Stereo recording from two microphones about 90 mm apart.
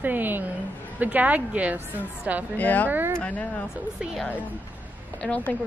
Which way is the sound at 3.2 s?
15° left (ahead or behind).